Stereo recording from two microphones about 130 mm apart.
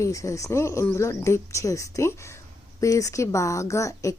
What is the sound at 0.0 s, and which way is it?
Speech, 25° left (ahead or behind).